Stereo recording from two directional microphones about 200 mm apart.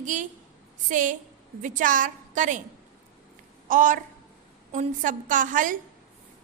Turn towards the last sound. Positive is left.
turn(degrees=-40)  # may be behind; listen again after turning